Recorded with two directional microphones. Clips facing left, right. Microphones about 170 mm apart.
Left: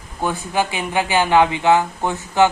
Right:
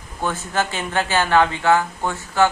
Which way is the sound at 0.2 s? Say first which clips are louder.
Left 2 dB; 15° left (ahead or behind).